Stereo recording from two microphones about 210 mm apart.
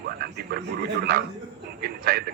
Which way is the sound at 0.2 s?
45° right (ahead or behind).